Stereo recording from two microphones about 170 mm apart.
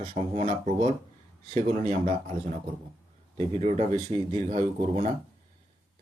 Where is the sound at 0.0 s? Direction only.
45° right (ahead or behind).